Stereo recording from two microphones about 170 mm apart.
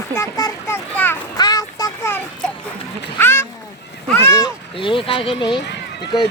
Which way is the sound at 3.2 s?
15° left (ahead or behind).